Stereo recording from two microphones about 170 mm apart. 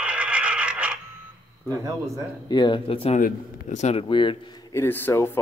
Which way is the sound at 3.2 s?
45° left (ahead or behind).